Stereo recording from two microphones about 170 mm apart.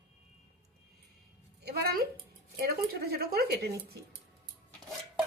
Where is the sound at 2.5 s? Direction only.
65° right (ahead or behind).